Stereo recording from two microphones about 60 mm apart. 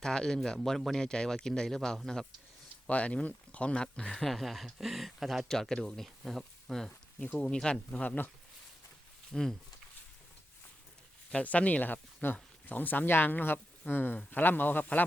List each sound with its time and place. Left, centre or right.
0.0 s speech: centre
2.8 s speech: left; by 5.5 s centre
5.5 s speech: centre; by 8.3 s left
9.3 s speech: centre
11.4 s a man's voice: left